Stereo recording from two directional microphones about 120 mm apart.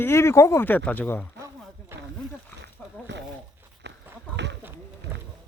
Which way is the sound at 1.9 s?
20° right (ahead or behind).